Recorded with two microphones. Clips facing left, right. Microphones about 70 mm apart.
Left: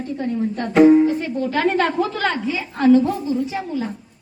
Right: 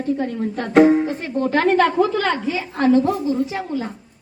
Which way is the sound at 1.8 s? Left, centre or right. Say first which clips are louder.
Right 3 dB; centre.